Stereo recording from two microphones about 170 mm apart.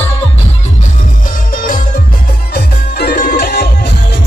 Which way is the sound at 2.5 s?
70° left (ahead or behind).